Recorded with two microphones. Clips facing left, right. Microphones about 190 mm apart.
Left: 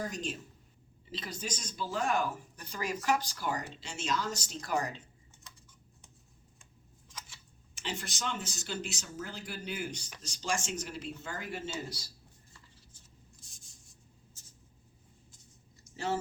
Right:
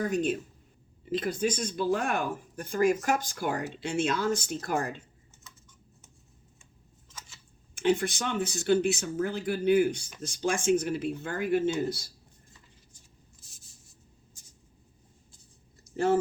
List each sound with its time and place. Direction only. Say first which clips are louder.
0.0 s speech: right 10 dB; 60° right (ahead or behind)
7.8 s speech: right 13 dB; 55° right (ahead or behind)
13.4 s writing: right 1 dB; 5° right (ahead or behind)
14.4 s a sound: right 1 dB; 15° right (ahead or behind)